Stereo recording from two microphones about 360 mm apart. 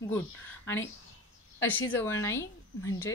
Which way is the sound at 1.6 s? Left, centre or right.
Centre.